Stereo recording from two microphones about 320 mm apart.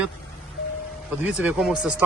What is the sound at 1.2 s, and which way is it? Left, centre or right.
Speech, centre.